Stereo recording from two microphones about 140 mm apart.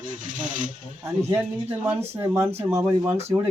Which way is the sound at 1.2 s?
15° right (ahead or behind).